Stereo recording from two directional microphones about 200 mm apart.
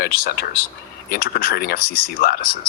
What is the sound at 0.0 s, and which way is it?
Speech, 50° left (ahead or behind).